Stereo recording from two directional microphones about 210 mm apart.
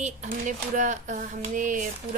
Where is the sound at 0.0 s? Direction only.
35° right (ahead or behind).